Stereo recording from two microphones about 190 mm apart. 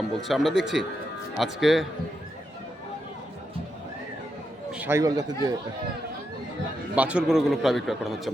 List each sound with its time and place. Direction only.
0.2 s a man's voice: centre (ahead or behind)
4.7 s speech: 10° right (ahead or behind)
6.9 s a man's voice: 5° right (ahead or behind)